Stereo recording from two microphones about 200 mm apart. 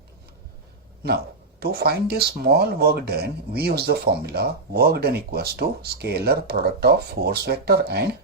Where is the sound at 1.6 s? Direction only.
50° right (ahead or behind).